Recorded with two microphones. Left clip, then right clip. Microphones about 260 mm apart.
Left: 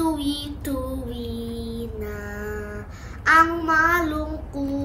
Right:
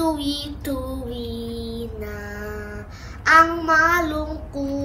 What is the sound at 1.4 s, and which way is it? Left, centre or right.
Mantra, centre.